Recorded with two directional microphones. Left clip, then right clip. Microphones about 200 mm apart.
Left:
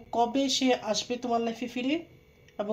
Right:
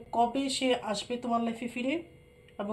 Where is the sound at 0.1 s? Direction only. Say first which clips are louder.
Left 2 dB; 35° left (ahead or behind).